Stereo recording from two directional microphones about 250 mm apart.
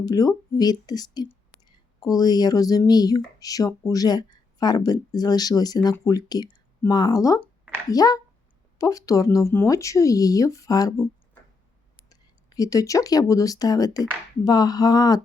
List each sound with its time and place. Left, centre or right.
0.0 s speech: centre
12.0 s speech: centre